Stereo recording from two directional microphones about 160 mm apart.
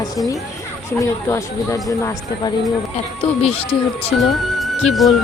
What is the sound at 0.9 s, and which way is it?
A woman's voice, 20° left (ahead or behind).